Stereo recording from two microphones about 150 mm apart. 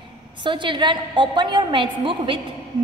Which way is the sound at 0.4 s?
30° right (ahead or behind).